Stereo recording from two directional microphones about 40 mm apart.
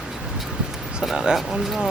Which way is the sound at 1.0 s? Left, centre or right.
Centre.